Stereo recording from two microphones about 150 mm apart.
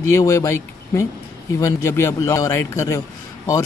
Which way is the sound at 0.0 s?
20° left (ahead or behind).